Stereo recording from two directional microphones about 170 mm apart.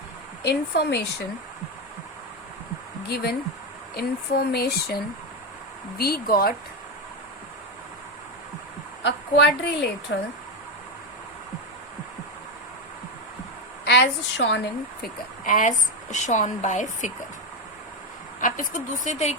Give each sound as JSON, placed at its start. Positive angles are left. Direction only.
{"t": 0.4, "sound": "speech", "side_deg": 75}
{"t": 3.1, "sound": "speech", "side_deg": 70}
{"t": 6.0, "sound": "speech", "side_deg": 65}
{"t": 9.0, "sound": "a woman's voice", "side_deg": 85}
{"t": 13.8, "sound": "a woman's voice", "side_deg": 90}
{"t": 15.0, "sound": "a woman's voice", "side_deg": 55}
{"t": 18.3, "sound": "a woman's voice", "side_deg": 50}